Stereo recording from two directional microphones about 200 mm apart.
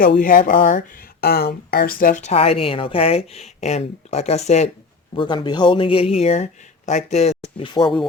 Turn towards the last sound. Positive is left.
turn(degrees=25)  # may be behind; listen again after turning